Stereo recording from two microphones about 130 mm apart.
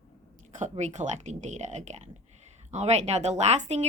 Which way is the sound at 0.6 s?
65° right (ahead or behind).